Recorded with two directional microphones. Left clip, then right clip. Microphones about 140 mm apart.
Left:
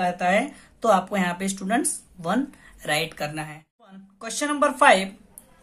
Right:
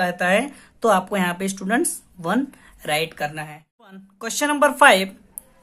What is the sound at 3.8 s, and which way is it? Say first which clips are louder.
Speech: right 5 dB; 50° right (ahead or behind).